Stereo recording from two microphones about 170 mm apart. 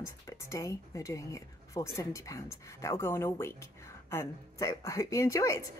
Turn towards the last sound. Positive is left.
turn(degrees=20)  # may be behind; listen again after turning